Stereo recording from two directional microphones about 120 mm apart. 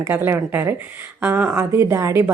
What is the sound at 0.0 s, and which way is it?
Speech, 20° right (ahead or behind).